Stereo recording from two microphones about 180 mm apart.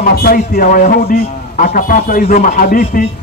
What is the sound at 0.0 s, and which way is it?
A man's voice, 55° left (ahead or behind).